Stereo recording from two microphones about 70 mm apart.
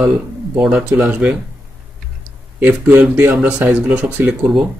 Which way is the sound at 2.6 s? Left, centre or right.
Right.